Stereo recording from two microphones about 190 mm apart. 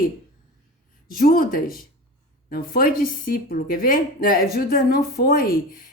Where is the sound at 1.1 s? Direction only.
50° left (ahead or behind).